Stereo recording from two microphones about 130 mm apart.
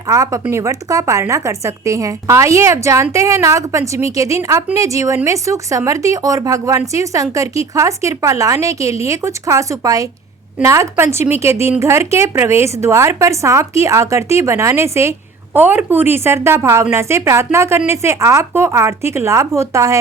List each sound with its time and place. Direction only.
0.1 s speech: 30° right (ahead or behind)